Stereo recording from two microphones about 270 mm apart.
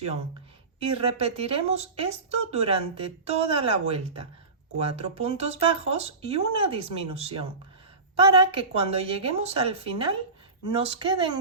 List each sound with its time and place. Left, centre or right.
0.8 s speech: right